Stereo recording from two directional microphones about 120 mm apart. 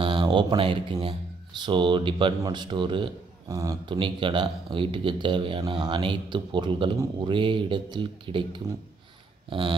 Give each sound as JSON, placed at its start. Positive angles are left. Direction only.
{"t": 0.2, "sound": "speech", "side_deg": -40}
{"t": 3.4, "sound": "speech", "side_deg": -30}